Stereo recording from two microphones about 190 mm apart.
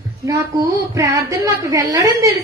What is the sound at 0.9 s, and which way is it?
A woman's voice, 15° right (ahead or behind).